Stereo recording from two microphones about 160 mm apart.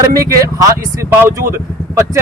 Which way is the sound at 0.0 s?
20° right (ahead or behind).